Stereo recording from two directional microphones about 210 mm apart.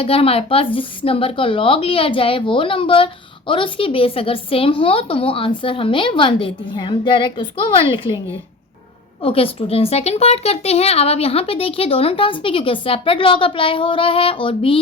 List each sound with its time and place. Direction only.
0.0 s a woman's voice: 25° left (ahead or behind)
9.2 s a woman's voice: 25° left (ahead or behind)